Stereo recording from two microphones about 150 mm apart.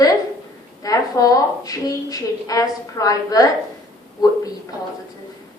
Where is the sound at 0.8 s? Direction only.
25° left (ahead or behind).